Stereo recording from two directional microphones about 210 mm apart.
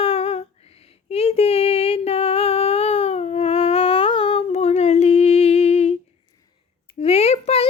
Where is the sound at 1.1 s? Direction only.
30° left (ahead or behind).